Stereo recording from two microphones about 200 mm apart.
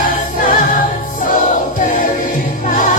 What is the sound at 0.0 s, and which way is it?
Choir, 40° left (ahead or behind).